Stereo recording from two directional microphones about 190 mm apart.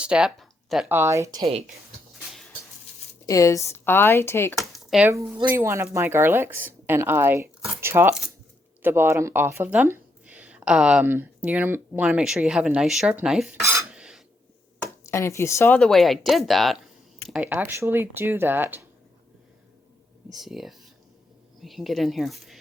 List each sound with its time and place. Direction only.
0.0 s speech: 5° right (ahead or behind)
0.9 s speech: 15° right (ahead or behind)
3.2 s speech: 15° left (ahead or behind)
4.7 s a sound: 5° right (ahead or behind)
5.1 s speech: 15° right (ahead or behind)
13.9 s a sound: 5° right (ahead or behind)
15.0 s speech: 15° left (ahead or behind); by 18.9 s 10° right (ahead or behind)
20.3 s speech: centre (ahead or behind)